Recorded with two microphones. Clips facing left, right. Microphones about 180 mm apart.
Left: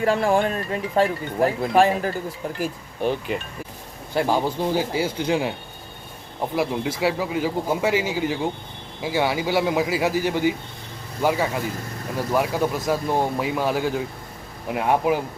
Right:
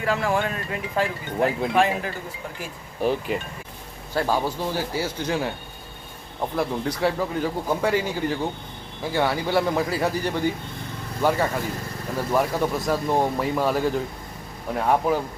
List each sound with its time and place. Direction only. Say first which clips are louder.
0.0 s speech: left 4 dB; 30° left (ahead or behind)
3.0 s speech: even; centre (ahead or behind)
4.1 s speech: left 2 dB; 15° left (ahead or behind)